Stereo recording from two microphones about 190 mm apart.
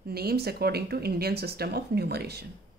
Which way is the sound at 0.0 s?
55° right (ahead or behind).